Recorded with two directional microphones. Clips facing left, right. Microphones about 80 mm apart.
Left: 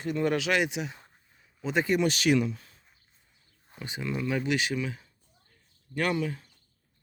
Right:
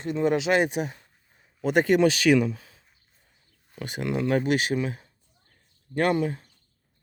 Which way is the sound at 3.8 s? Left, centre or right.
Right.